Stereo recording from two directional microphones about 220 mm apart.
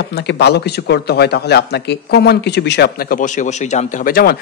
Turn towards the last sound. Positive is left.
turn(degrees=45)  # may be behind; listen again after turning